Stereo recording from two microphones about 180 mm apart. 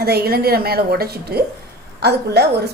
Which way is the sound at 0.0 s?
60° right (ahead or behind).